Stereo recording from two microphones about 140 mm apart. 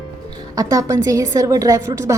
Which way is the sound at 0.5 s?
25° right (ahead or behind).